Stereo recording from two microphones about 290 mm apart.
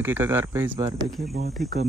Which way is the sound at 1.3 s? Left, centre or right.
Right.